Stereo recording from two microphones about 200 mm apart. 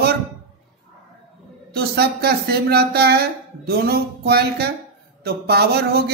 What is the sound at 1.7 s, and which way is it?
Mantra, 50° right (ahead or behind).